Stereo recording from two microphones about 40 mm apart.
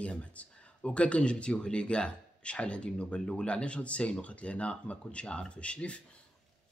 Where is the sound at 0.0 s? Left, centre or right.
Left.